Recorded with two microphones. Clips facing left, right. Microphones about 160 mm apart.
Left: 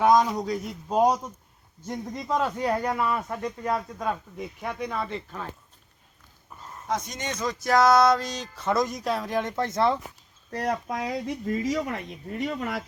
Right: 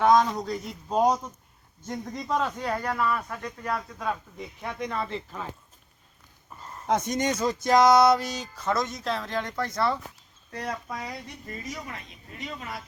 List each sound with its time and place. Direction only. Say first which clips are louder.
0.0 s speech: even; 10° left (ahead or behind)
3.4 s speech: left 4 dB; 10° left (ahead or behind)
6.5 s a sound: even; centre (ahead or behind)
6.8 s speech: right 5 dB; 50° right (ahead or behind)
7.4 s speech: even; 20° right (ahead or behind)
8.6 s speech: left 3 dB; 10° left (ahead or behind)
10.9 s speech: left 8 dB; 85° left; by 12.8 s 65° left (ahead or behind)